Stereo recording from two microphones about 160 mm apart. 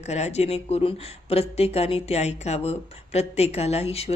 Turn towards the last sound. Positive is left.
turn(degrees=40)  # may be behind; listen again after turning